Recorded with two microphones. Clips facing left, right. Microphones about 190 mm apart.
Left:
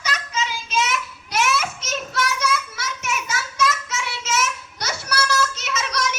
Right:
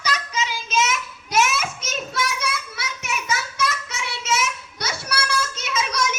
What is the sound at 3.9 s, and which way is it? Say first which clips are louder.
Child singing: even; 60° right (ahead or behind).